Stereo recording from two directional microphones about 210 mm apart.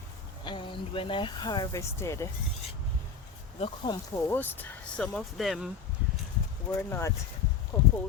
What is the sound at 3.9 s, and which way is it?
Speech, 20° left (ahead or behind).